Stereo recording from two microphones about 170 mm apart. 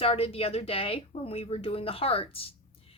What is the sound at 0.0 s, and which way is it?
Speech, 35° left (ahead or behind).